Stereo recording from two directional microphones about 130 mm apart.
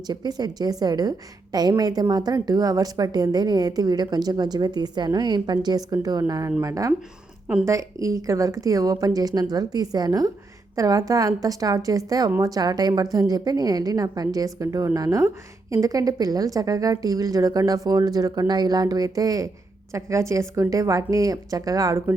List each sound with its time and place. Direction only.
0.1 s a woman's voice: 30° right (ahead or behind)